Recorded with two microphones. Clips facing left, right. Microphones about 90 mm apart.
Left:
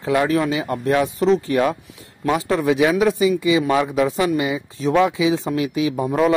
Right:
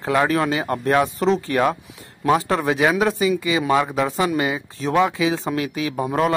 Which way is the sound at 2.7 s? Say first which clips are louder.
Left 3 dB; 40° right (ahead or behind).